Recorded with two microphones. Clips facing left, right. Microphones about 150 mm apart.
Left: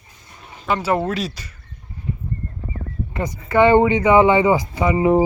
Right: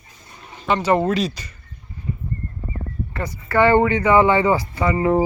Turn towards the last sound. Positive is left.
turn(degrees=15)  # may be behind; listen again after turning